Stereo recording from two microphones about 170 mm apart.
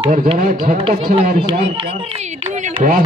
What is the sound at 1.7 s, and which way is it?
A man's voice, 35° right (ahead or behind).